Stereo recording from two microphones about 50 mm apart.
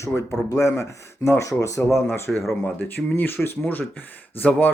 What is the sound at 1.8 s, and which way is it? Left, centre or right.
Speech, left.